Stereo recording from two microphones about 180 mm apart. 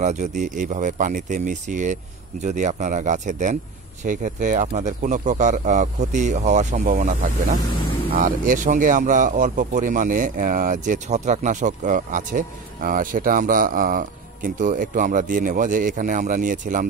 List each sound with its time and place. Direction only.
0.0 s speech: 40° right (ahead or behind)